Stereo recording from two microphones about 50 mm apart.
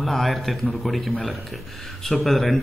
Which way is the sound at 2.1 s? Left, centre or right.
Centre.